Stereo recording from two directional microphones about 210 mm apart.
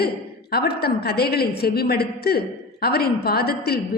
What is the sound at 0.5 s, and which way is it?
A woman's voice, 50° left (ahead or behind).